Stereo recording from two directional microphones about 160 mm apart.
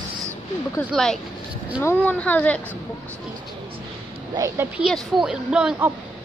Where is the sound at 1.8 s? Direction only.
15° left (ahead or behind).